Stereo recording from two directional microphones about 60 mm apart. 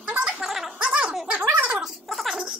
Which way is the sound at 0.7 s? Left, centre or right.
Centre.